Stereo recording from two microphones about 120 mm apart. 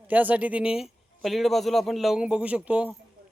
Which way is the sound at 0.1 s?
15° right (ahead or behind).